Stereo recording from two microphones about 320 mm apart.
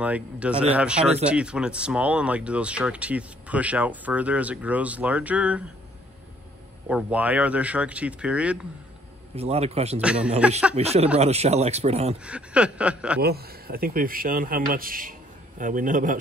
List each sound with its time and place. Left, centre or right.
0.0 s speech: centre
6.9 s speech: centre
9.3 s speech: centre
9.9 s speech: centre
10.8 s speech: centre
12.2 s speech: centre
13.2 s speech: right